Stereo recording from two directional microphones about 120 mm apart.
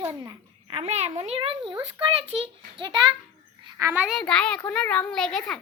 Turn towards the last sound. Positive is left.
turn(degrees=5)  # may be behind; listen again after turning